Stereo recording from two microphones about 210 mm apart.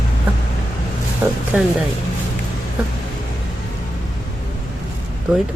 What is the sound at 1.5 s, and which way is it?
Speech, 5° right (ahead or behind).